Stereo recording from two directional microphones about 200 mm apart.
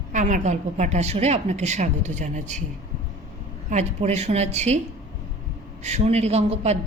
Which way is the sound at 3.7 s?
35° right (ahead or behind).